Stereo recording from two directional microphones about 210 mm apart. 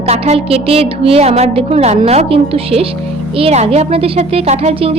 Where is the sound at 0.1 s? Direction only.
30° right (ahead or behind).